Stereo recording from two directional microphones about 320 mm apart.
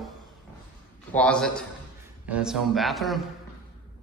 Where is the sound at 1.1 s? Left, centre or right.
Centre.